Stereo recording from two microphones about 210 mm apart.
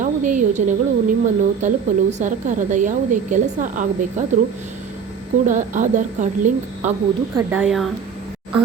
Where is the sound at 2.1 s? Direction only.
35° right (ahead or behind).